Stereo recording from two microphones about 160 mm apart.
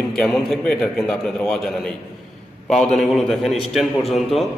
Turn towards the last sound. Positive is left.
turn(degrees=0)  # may be behind; listen again after turning